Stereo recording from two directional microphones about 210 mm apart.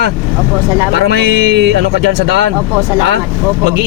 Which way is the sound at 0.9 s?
55° right (ahead or behind).